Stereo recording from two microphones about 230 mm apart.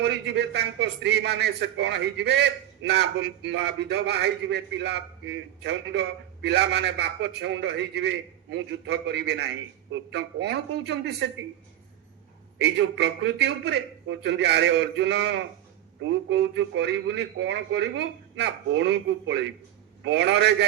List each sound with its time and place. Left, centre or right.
0.0 s speech: right
12.5 s speech: right